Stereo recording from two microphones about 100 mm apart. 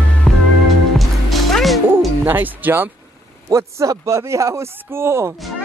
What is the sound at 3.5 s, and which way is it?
Speech, 30° right (ahead or behind).